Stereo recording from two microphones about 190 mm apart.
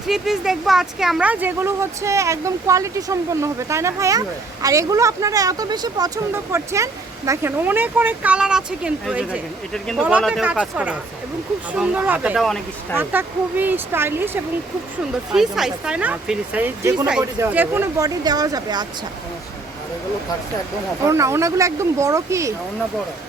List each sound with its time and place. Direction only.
0.1 s speech: centre (ahead or behind)
13.0 s speech: 10° right (ahead or behind)
15.3 s speech: centre (ahead or behind); by 18.9 s 20° right (ahead or behind)
21.1 s speech: 15° right (ahead or behind)